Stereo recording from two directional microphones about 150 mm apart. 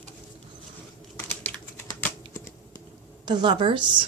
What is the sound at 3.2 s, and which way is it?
Speech, 30° right (ahead or behind).